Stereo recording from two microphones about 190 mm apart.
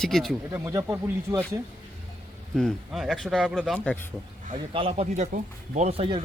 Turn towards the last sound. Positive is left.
turn(degrees=-30)  # may be behind; listen again after turning